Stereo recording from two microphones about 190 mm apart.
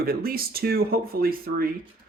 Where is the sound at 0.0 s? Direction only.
50° right (ahead or behind).